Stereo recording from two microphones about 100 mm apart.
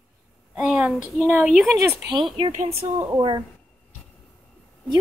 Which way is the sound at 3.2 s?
50° right (ahead or behind).